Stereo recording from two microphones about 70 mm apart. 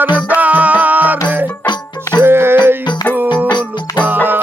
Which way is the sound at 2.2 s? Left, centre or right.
Right.